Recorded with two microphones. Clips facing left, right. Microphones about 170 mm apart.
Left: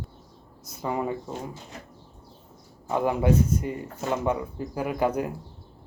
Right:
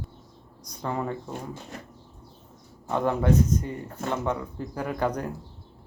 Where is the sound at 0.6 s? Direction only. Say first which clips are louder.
Left 2 dB; 5° left (ahead or behind).